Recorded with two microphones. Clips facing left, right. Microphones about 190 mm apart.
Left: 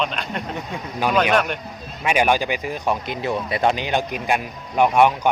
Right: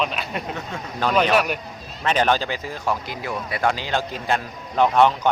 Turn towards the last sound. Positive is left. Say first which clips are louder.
# left 1 dB
turn(degrees=15)  # may be behind; listen again after turning